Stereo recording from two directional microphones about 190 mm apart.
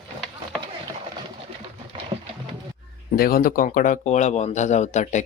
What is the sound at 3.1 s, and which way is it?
Speech, 50° left (ahead or behind).